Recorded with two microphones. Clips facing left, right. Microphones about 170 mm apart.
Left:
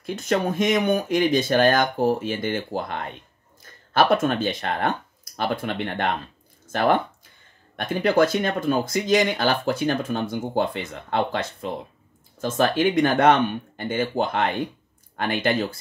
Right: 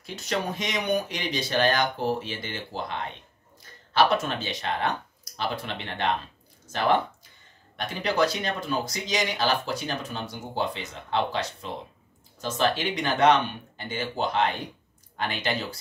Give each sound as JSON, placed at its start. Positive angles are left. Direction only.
{"t": 0.0, "sound": "speech", "side_deg": 50}